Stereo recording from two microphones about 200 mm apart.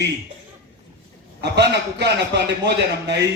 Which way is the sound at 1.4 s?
60° right (ahead or behind).